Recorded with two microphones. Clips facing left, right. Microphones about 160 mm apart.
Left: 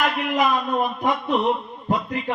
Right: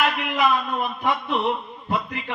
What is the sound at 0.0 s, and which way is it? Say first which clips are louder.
A man's voice: left 1 dB; 40° left (ahead or behind).